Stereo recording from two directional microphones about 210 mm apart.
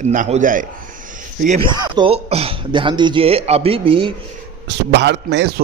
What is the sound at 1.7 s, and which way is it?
Speech, 20° right (ahead or behind).